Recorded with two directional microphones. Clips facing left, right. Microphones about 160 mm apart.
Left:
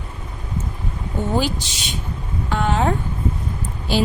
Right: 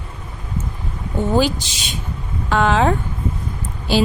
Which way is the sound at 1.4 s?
90° right.